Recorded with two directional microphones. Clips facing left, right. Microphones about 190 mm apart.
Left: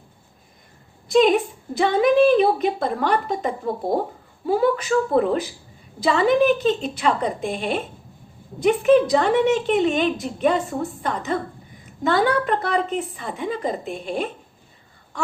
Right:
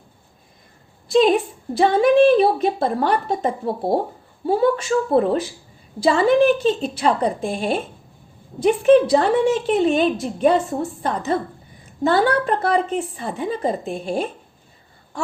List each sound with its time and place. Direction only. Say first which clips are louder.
1.1 s a woman's voice: right 1 dB; 30° right (ahead or behind)
9.0 s speech: right 1 dB; 35° right (ahead or behind)